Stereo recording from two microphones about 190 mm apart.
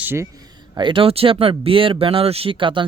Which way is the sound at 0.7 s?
25° right (ahead or behind).